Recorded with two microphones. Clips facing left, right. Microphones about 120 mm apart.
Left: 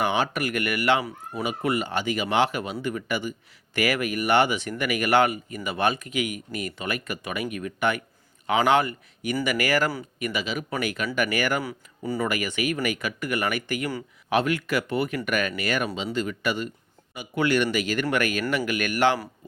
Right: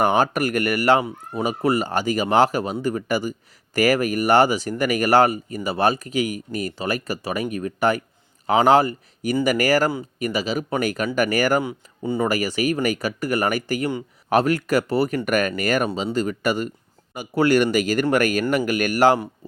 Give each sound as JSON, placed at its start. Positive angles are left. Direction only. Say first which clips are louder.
{"t": 0.0, "sound": "speech", "louder": "right 6 dB", "side_deg": -45}
{"t": 1.0, "sound": "speech", "louder": "right 5 dB", "side_deg": -25}
{"t": 1.5, "sound": "speech", "louder": "right 5 dB", "side_deg": -40}
{"t": 11.6, "sound": "speech", "louder": "right 5 dB", "side_deg": -25}
{"t": 12.3, "sound": "speech", "louder": "right 5 dB", "side_deg": -35}